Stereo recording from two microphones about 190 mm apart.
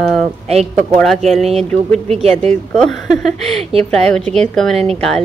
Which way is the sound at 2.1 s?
35° right (ahead or behind).